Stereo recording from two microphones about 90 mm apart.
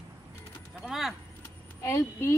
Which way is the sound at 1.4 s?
35° left (ahead or behind).